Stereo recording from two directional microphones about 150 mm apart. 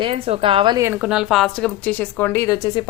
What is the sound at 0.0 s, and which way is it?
Speech, 35° right (ahead or behind).